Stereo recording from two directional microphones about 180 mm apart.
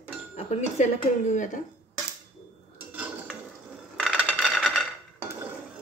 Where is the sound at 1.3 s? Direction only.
45° left (ahead or behind).